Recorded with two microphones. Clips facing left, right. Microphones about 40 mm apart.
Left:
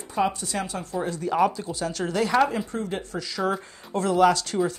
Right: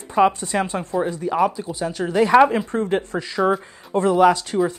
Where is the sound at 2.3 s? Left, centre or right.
Right.